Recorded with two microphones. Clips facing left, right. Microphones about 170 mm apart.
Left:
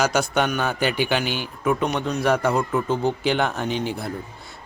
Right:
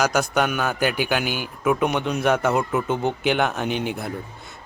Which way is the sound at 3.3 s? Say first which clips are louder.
Right 3 dB; 5° right (ahead or behind).